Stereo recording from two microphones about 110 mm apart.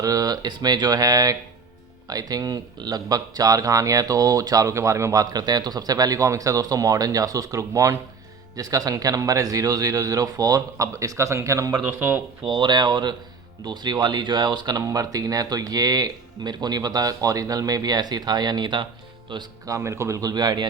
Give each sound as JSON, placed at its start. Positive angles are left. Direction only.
{"t": 0.0, "sound": "speech", "side_deg": -35}
{"t": 11.9, "sound": "speech", "side_deg": -20}
{"t": 12.5, "sound": "speech", "side_deg": -45}
{"t": 19.6, "sound": "speech", "side_deg": -30}